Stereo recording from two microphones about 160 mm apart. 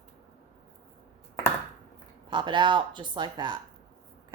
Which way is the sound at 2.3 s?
30° right (ahead or behind).